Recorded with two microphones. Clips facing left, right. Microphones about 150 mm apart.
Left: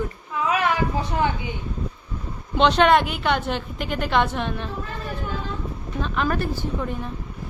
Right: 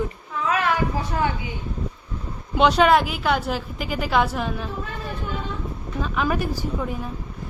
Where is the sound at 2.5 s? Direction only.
10° right (ahead or behind).